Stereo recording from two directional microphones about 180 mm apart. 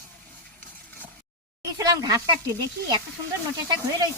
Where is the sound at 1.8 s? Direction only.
20° right (ahead or behind).